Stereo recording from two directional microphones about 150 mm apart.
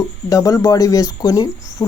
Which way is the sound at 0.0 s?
25° left (ahead or behind).